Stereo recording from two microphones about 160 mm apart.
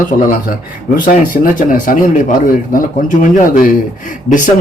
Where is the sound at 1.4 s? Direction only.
50° left (ahead or behind).